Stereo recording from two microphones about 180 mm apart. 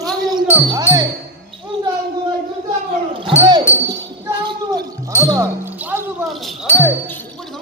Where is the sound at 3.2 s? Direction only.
25° right (ahead or behind).